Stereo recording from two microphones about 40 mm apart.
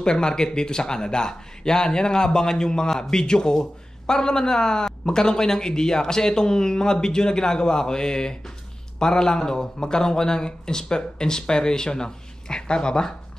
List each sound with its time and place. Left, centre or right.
0.0 s a man's voice: centre